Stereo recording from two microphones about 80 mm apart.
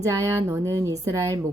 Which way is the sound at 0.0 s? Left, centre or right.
Right.